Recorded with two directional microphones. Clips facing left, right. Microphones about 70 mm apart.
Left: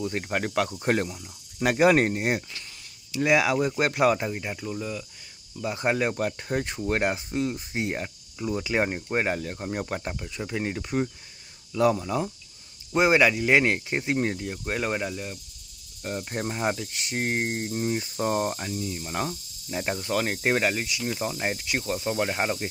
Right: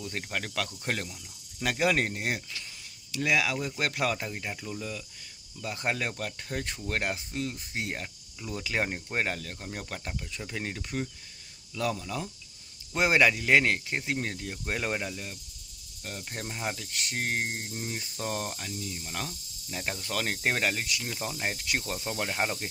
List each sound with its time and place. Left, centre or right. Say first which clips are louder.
0.0 s speech: left 7 dB; left
12.9 s speech: left 4 dB; centre; by 14.4 s left
14.4 s speech: left 4 dB; centre
16.0 s speech: left 8 dB; left